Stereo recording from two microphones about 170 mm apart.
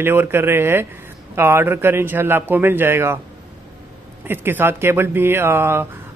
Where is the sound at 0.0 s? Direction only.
15° right (ahead or behind).